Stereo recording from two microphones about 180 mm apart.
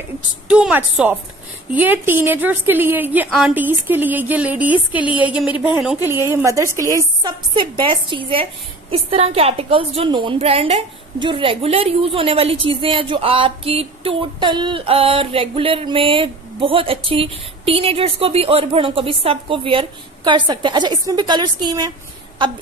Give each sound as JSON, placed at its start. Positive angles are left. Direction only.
{"t": 0.5, "sound": "a woman's voice", "side_deg": -5}